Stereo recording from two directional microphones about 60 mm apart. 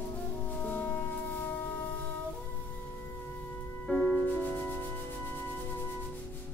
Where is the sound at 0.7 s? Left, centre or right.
Left.